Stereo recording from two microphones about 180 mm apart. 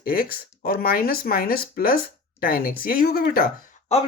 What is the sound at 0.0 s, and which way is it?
Speech, 55° left (ahead or behind).